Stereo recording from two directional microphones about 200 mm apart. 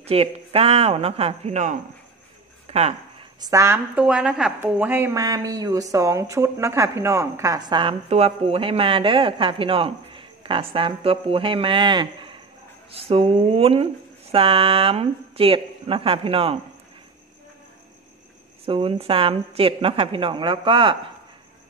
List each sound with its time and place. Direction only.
0.0 s a man's voice: 30° right (ahead or behind)
2.6 s a sound: 30° right (ahead or behind)
3.4 s a woman's voice: 15° right (ahead or behind)
18.7 s a woman's voice: 25° right (ahead or behind)